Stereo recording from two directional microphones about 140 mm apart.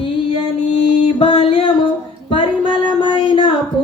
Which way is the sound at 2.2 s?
40° left (ahead or behind).